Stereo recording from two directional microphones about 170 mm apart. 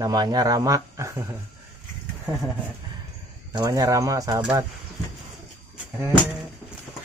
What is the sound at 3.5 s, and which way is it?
Speech, 25° right (ahead or behind).